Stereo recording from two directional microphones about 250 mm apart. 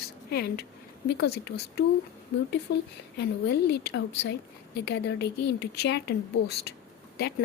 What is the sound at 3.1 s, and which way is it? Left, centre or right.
A woman's voice, left.